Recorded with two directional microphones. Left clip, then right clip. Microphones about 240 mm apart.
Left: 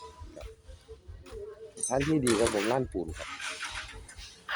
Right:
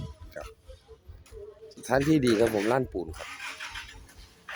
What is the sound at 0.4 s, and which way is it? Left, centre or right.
Music, centre.